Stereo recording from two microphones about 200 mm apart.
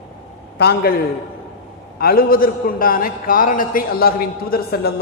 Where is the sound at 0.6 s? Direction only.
50° left (ahead or behind).